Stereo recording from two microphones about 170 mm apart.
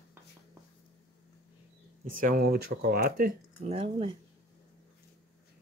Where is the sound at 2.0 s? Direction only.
55° right (ahead or behind).